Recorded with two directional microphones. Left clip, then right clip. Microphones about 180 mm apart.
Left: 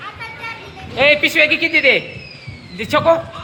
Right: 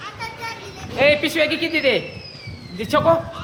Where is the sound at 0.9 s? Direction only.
20° left (ahead or behind).